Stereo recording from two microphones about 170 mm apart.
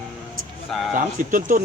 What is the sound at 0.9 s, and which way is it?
Speech, 50° right (ahead or behind).